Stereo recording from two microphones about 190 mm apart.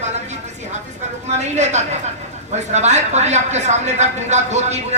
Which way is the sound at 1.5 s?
35° right (ahead or behind).